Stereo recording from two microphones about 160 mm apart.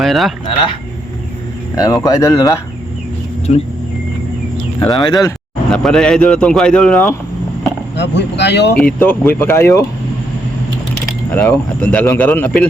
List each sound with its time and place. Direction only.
0.0 s speech: centre (ahead or behind)
0.4 s speech: 30° left (ahead or behind)
3.5 s speech: 45° left (ahead or behind)
4.9 s speech: 25° left (ahead or behind)
5.7 s speech: 5° left (ahead or behind)
7.9 s speech: 90° left
9.0 s speech: 10° left (ahead or behind)
11.3 s speech: 10° left (ahead or behind)